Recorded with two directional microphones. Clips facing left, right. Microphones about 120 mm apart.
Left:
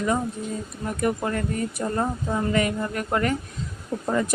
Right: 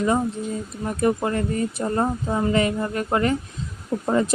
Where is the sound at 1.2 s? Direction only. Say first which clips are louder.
Right 3 dB; 25° right (ahead or behind).